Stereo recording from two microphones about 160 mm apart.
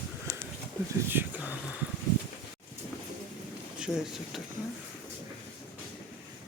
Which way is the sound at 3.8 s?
5° right (ahead or behind).